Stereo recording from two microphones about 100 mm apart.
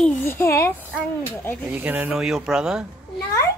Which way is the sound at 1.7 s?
15° right (ahead or behind).